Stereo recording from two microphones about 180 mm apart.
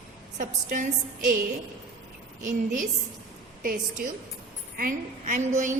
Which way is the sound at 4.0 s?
55° right (ahead or behind).